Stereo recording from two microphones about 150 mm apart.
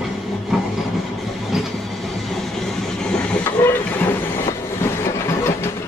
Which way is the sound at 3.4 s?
15° left (ahead or behind).